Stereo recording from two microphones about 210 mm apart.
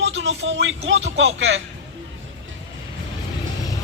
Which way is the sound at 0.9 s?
65° right (ahead or behind).